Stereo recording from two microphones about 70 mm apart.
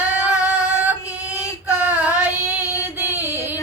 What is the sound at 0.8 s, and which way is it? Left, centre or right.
Female singing, right.